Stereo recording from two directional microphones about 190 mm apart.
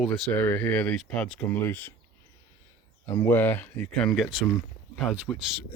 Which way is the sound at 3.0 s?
10° left (ahead or behind).